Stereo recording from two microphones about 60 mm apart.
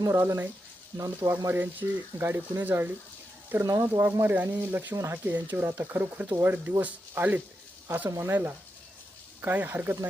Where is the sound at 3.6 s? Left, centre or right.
Right.